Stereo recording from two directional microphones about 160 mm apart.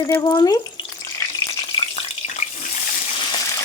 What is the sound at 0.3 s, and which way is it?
Speech, 25° left (ahead or behind).